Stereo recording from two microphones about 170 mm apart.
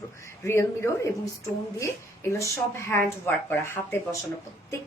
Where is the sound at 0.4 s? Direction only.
15° left (ahead or behind).